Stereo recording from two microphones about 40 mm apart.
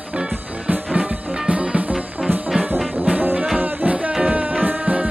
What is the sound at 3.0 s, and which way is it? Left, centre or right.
Music, right.